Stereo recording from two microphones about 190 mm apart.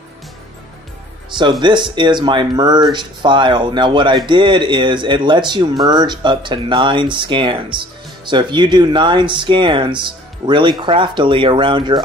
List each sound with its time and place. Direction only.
1.6 s speech: 25° right (ahead or behind)